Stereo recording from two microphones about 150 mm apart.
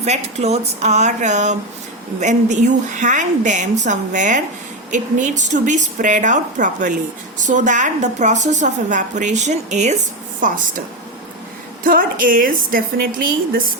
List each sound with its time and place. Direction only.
0.0 s a woman's voice: 45° right (ahead or behind)
11.8 s a woman's voice: 70° right (ahead or behind)